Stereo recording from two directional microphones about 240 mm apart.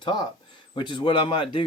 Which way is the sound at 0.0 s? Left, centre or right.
Centre.